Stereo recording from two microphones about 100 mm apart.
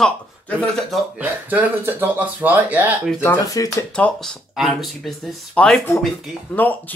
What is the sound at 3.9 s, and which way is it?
Speech, 10° left (ahead or behind).